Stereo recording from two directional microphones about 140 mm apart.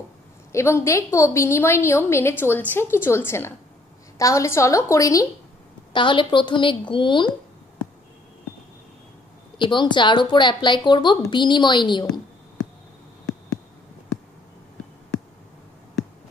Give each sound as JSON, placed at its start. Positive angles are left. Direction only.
{"t": 0.5, "sound": "a woman's voice", "side_deg": 20}
{"t": 5.9, "sound": "speech", "side_deg": 35}
{"t": 9.6, "sound": "speech", "side_deg": 35}